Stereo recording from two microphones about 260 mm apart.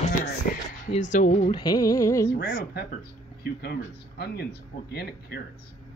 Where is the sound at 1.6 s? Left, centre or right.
Centre.